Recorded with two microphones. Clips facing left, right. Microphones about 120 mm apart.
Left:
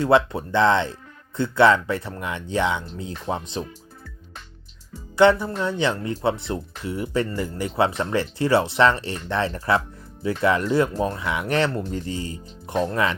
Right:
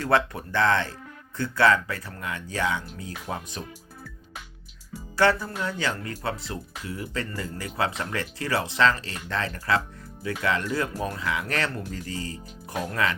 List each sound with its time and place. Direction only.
0.0 s speech: 20° left (ahead or behind)
5.1 s speech: 20° left (ahead or behind)